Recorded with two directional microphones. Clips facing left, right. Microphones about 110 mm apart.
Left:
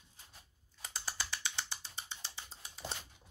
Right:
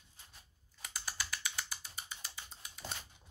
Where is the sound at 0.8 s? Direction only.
25° left (ahead or behind).